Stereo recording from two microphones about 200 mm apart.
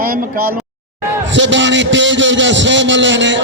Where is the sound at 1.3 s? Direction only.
65° right (ahead or behind).